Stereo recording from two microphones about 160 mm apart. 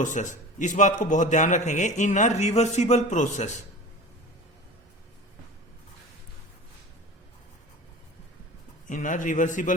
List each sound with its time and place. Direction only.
0.0 s a man's voice: 50° left (ahead or behind)
8.9 s a man's voice: 55° left (ahead or behind)